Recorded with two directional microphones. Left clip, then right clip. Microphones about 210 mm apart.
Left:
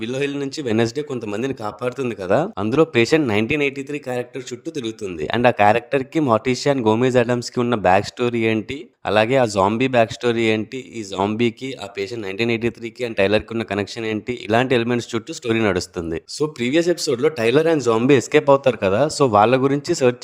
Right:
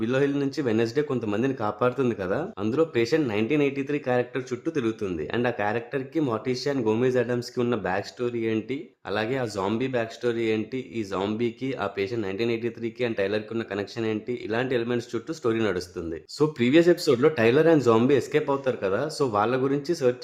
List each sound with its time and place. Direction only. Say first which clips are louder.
0.0 s speech: left 1 dB; 40° left (ahead or behind)
5.2 s speech: left 12 dB; 40° left (ahead or behind)